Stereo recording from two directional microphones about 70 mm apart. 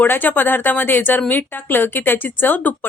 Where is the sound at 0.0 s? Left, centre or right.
Left.